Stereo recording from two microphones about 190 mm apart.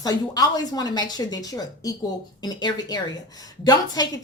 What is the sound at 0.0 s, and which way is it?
A woman's voice, 20° left (ahead or behind).